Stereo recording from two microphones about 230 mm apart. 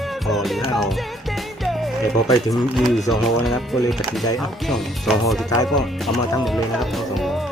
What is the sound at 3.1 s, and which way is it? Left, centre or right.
Speech, centre.